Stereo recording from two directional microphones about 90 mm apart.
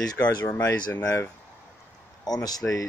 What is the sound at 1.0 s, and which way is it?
Speech, 35° left (ahead or behind).